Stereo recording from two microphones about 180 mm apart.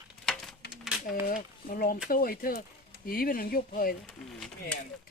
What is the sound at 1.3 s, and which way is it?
Speech, 55° left (ahead or behind).